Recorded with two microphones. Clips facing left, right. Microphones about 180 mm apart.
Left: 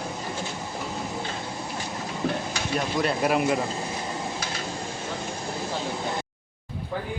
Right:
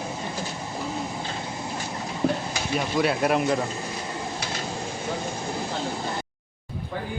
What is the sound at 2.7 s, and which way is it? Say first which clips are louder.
Speech: right 2 dB; centre (ahead or behind).